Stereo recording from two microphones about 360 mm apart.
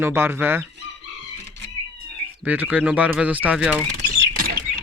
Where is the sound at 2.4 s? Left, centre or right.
Centre.